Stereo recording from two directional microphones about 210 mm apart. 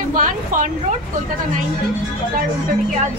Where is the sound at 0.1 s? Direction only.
40° right (ahead or behind).